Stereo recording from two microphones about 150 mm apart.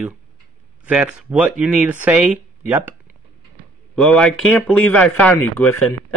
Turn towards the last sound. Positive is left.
turn(degrees=10)  # may be behind; listen again after turning